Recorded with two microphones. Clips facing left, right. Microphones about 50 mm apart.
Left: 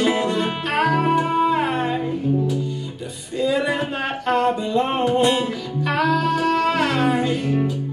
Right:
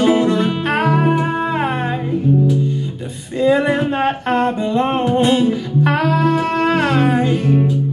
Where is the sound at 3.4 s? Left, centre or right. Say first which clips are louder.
Right 6 dB; right.